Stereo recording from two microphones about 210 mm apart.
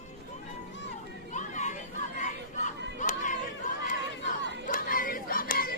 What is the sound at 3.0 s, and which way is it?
Chatter, 40° left (ahead or behind).